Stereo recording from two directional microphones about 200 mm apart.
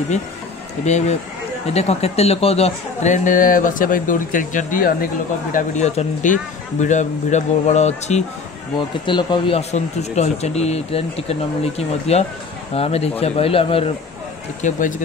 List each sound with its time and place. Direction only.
0.8 s speech: 35° left (ahead or behind)
8.7 s a man's voice: 25° left (ahead or behind)
14.6 s speech: 40° left (ahead or behind)